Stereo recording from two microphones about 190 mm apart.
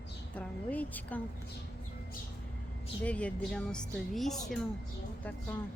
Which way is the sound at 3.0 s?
5° left (ahead or behind).